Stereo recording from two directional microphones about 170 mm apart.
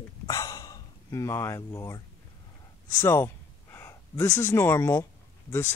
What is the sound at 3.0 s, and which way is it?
Speech, 15° left (ahead or behind).